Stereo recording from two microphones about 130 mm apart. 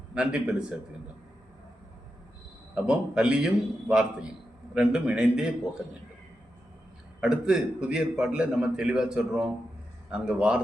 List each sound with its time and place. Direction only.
0.1 s speech: 10° right (ahead or behind)
2.7 s a man's voice: 5° right (ahead or behind)
7.2 s a man's voice: 5° right (ahead or behind)